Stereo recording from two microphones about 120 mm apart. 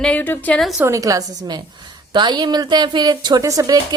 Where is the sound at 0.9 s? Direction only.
30° right (ahead or behind).